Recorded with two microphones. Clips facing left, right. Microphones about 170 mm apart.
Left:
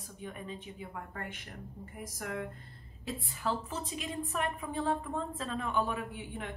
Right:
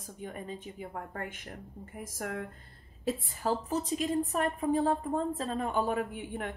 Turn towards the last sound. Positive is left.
turn(degrees=-50)  # may be behind; listen again after turning